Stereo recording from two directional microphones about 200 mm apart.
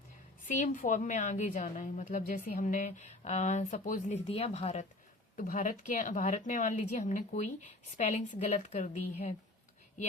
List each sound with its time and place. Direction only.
0.4 s a woman's voice: 40° left (ahead or behind)